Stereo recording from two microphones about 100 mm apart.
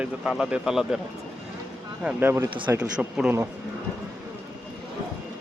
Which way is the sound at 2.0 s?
20° right (ahead or behind).